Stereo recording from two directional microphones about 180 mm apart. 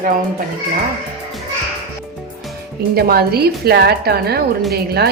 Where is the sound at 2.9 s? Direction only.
60° right (ahead or behind).